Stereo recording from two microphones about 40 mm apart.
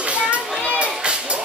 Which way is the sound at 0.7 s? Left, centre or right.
Right.